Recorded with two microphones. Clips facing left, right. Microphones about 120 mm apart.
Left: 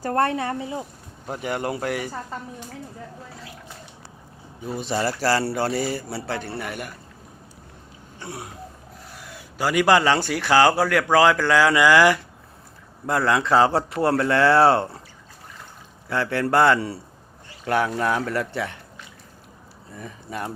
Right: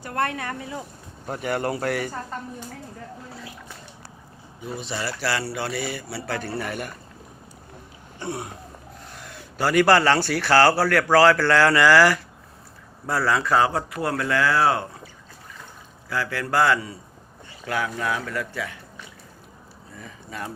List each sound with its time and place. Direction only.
0.0 s speech: 35° left (ahead or behind)
1.3 s a man's voice: 15° left (ahead or behind)
4.8 s speech: 45° left (ahead or behind)
6.3 s a man's voice: 15° left (ahead or behind)
8.2 s a sound: centre (ahead or behind)
9.1 s a man's voice: 10° left (ahead or behind); by 14.8 s 30° left (ahead or behind)
16.0 s speech: 25° left (ahead or behind)
20.0 s speech: 25° left (ahead or behind)